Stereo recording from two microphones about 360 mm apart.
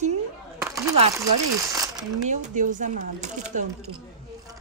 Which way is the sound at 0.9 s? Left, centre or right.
Centre.